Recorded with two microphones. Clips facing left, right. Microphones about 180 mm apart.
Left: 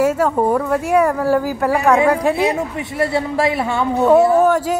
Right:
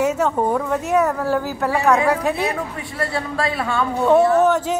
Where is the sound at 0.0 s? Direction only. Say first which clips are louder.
Left 3 dB; 10° left (ahead or behind).